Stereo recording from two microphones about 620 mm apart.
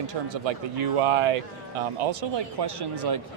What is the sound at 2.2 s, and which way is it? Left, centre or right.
Speech, right.